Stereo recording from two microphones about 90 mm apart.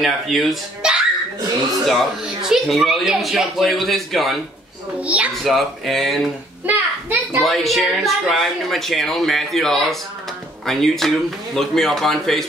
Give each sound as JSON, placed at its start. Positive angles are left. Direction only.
{"t": 0.0, "sound": "speech", "side_deg": 0}
{"t": 5.0, "sound": "a woman's voice", "side_deg": -15}
{"t": 5.4, "sound": "speech", "side_deg": 0}
{"t": 6.6, "sound": "a sound", "side_deg": -20}
{"t": 7.3, "sound": "speech", "side_deg": 0}